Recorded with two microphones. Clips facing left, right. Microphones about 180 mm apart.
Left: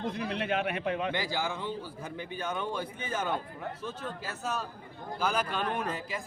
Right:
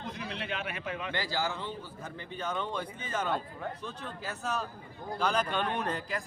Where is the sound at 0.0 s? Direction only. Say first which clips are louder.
Left 6 dB; 50° left (ahead or behind).